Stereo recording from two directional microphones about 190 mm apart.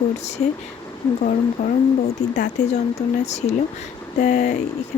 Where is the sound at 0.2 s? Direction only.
35° left (ahead or behind).